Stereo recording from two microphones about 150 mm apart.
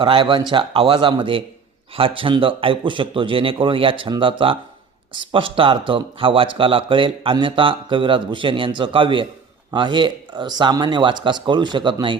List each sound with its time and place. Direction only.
0.0 s speech: 35° right (ahead or behind)